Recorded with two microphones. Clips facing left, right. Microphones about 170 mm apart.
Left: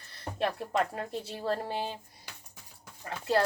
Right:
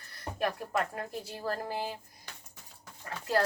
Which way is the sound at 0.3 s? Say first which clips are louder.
Left 2 dB; 25° left (ahead or behind).